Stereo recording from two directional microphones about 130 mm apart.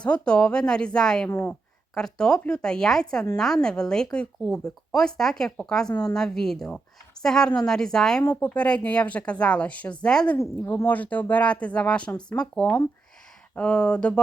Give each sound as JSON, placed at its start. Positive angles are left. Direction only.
{"t": 0.0, "sound": "speech", "side_deg": 5}
{"t": 2.0, "sound": "a woman's voice", "side_deg": 5}
{"t": 10.3, "sound": "speech", "side_deg": 20}